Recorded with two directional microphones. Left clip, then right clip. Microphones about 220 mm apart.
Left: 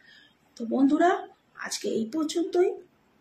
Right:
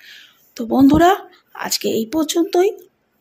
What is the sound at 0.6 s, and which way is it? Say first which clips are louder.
Speech: right 10 dB; 40° right (ahead or behind).